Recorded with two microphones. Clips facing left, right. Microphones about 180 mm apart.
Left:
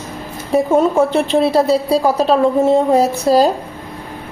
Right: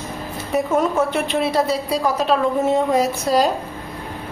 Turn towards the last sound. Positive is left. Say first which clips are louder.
# left 5 dB
turn(degrees=35)  # may be behind; listen again after turning